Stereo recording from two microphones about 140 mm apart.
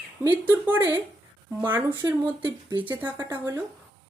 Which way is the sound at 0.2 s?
15° right (ahead or behind).